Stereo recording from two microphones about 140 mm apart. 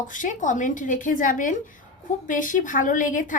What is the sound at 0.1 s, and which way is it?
A woman's voice, 65° left (ahead or behind).